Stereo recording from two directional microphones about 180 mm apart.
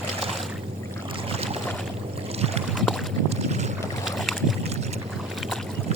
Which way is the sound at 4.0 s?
Centre (ahead or behind).